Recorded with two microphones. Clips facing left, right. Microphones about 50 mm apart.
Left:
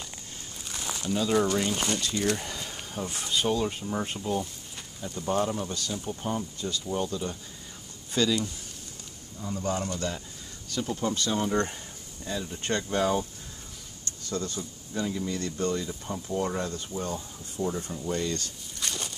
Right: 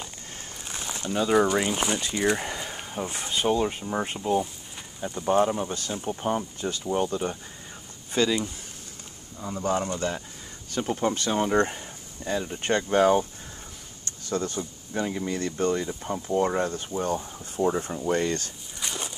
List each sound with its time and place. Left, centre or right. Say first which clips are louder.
0.9 s speech: right 3 dB; right
8.1 s speech: right 2 dB; right
14.3 s speech: right 4 dB; right
18.8 s a sound: right 1 dB; centre